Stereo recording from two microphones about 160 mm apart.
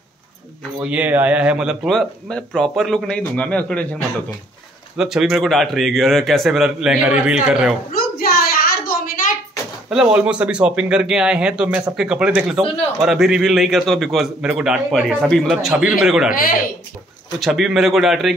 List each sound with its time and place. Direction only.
0.7 s a man's voice: 10° right (ahead or behind)
4.9 s a man's voice: 5° right (ahead or behind)
7.9 s a sound: 65° left (ahead or behind)
9.8 s a man's voice: 5° right (ahead or behind)
17.4 s a man's voice: centre (ahead or behind)